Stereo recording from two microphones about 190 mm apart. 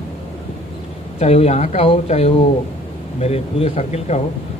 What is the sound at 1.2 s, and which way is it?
A man's voice, 35° left (ahead or behind).